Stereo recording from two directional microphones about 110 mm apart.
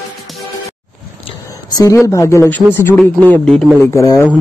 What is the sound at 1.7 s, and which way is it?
A woman's voice, 30° left (ahead or behind).